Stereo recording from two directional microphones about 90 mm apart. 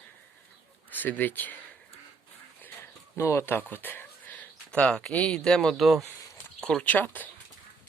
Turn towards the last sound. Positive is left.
turn(degrees=20)  # may be behind; listen again after turning